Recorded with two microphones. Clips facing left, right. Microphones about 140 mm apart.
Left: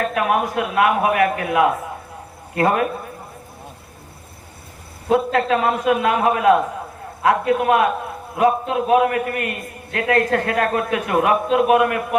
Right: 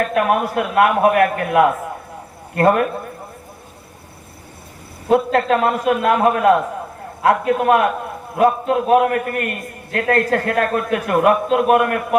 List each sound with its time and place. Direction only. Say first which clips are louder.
0.1 s a man's voice: right 2 dB; 50° right (ahead or behind)
5.1 s a man's voice: right 2 dB; 50° right (ahead or behind)